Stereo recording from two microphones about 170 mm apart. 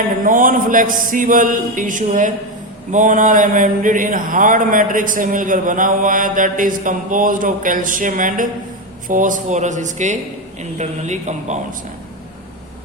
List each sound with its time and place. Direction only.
0.3 s speech: 50° right (ahead or behind)